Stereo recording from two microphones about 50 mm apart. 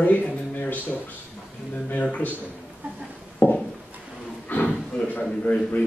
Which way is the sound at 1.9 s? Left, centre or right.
Left.